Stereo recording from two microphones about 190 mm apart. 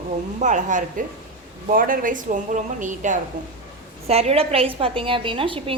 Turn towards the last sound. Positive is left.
turn(degrees=-25)  # may be behind; listen again after turning